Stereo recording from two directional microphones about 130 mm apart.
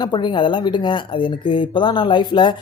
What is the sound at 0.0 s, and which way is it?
Speech, 35° left (ahead or behind).